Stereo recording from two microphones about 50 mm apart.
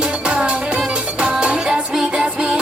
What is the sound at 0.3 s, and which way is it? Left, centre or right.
Music, right.